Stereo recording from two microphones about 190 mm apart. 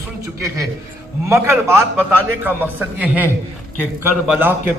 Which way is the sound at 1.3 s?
15° right (ahead or behind).